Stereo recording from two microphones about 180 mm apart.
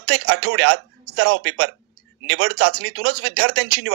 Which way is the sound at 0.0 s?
65° right (ahead or behind).